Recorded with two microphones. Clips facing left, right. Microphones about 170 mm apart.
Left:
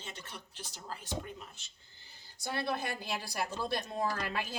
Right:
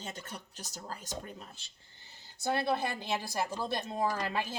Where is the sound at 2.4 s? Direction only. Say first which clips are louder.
Right 5 dB; 20° right (ahead or behind).